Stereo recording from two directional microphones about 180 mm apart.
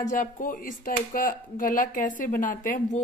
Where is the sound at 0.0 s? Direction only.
45° left (ahead or behind).